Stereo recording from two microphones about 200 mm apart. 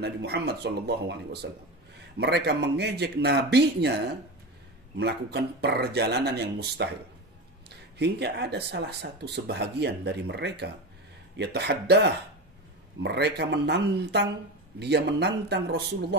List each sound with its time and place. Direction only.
0.0 s speech: 55° right (ahead or behind)
8.0 s speech: 55° right (ahead or behind)